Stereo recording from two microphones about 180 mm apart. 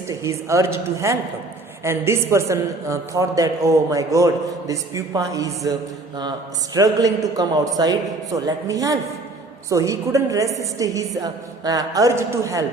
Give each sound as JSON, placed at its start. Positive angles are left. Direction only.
{"t": 0.1, "sound": "a woman's voice", "side_deg": -15}
{"t": 6.7, "sound": "a man's voice", "side_deg": -20}